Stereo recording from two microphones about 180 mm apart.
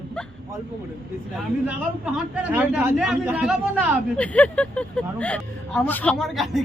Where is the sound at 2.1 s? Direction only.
10° right (ahead or behind).